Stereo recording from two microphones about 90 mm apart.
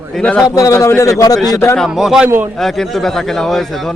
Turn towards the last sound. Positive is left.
turn(degrees=0)  # may be behind; listen again after turning